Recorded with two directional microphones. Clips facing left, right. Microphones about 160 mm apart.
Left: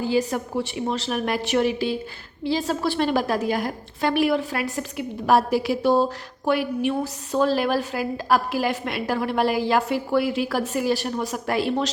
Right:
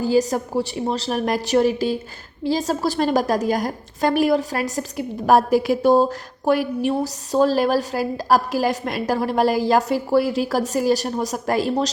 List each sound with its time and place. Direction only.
0.0 s a woman's voice: 40° right (ahead or behind)